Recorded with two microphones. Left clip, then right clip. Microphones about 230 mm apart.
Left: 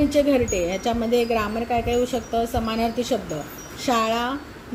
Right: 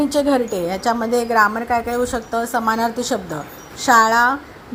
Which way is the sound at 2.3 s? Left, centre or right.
Right.